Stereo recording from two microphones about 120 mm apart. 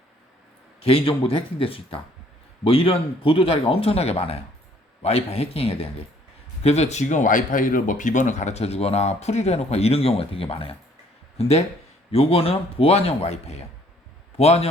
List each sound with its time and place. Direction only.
0.8 s speech: 55° left (ahead or behind)